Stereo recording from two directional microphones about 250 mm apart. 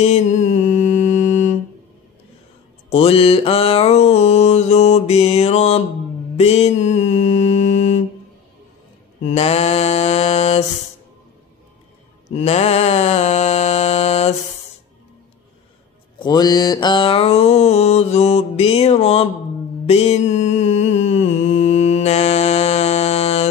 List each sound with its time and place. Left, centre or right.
0.0 s mantra: left
2.9 s music: left
6.3 s mantra: left
9.3 s mantra: left
12.3 s mantra: left
16.2 s music: centre
19.9 s mantra: left